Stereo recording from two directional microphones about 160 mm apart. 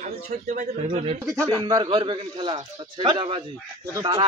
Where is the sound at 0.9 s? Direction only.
35° right (ahead or behind).